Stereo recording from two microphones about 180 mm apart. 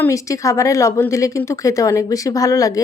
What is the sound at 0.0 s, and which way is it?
A woman's voice, 15° left (ahead or behind).